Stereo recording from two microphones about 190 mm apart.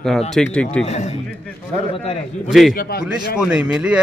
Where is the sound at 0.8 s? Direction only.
35° left (ahead or behind).